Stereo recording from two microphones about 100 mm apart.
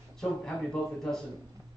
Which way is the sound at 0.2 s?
10° left (ahead or behind).